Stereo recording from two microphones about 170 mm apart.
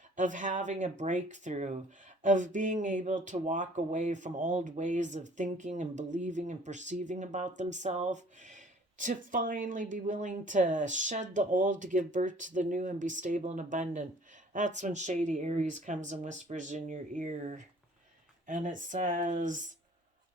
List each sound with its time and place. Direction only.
0.2 s speech: 50° right (ahead or behind)